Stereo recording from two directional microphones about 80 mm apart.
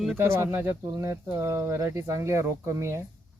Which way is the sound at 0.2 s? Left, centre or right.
Right.